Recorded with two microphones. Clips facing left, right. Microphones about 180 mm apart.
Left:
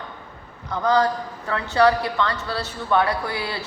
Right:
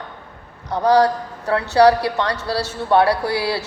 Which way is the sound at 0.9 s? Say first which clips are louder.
Right 5 dB; 75° right (ahead or behind).